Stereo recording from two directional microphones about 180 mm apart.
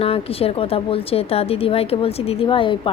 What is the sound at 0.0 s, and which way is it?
A woman's voice, 30° left (ahead or behind).